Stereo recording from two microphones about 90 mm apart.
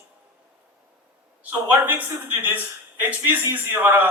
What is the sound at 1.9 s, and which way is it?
Speech, 20° right (ahead or behind).